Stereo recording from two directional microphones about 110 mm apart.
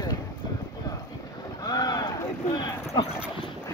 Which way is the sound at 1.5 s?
35° left (ahead or behind).